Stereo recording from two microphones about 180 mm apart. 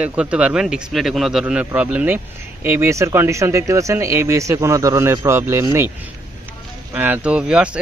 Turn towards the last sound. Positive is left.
turn(degrees=-5)  # may be behind; listen again after turning